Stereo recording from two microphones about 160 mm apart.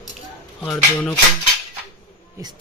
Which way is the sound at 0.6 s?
10° left (ahead or behind).